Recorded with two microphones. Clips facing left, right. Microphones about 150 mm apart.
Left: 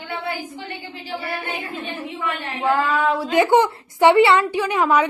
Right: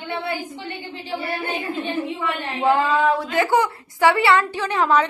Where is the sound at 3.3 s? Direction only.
20° left (ahead or behind).